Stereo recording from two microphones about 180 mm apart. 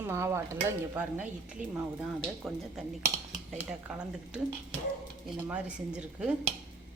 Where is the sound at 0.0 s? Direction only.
15° right (ahead or behind).